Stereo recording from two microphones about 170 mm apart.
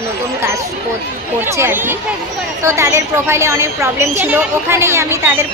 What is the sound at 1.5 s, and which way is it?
A woman's voice, 15° right (ahead or behind).